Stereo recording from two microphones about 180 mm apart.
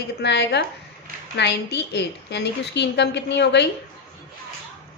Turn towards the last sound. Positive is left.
turn(degrees=70)  # may be behind; listen again after turning